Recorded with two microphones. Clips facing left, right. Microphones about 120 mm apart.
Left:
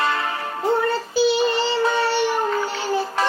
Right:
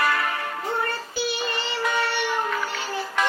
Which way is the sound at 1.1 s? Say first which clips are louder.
Left 9 dB; 30° left (ahead or behind).